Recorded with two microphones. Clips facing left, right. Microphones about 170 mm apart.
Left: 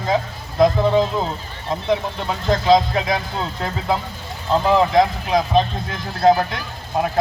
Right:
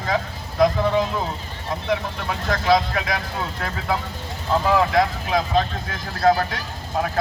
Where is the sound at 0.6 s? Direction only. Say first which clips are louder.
Left 3 dB; 25° left (ahead or behind).